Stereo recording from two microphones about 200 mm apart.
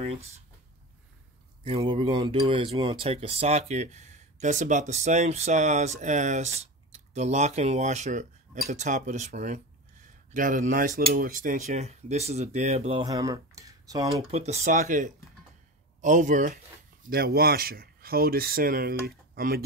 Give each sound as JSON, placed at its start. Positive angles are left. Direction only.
{"t": 1.6, "sound": "speech", "side_deg": -25}
{"t": 14.3, "sound": "speech", "side_deg": -35}